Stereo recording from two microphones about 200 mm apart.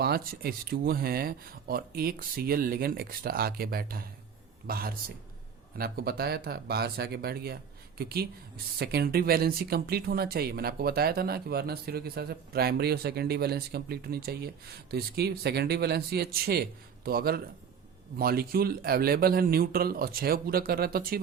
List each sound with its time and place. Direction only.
0.0 s speech: 50° right (ahead or behind)